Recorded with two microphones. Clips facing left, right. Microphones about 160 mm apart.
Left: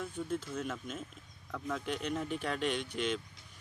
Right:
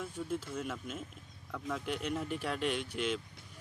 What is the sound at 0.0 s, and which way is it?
Speech, 10° right (ahead or behind).